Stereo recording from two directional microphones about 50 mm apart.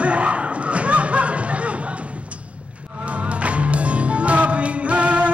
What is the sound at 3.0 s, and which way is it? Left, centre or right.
Music, right.